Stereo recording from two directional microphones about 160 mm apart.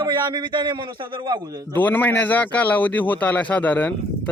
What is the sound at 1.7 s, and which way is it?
A man's voice, 10° left (ahead or behind).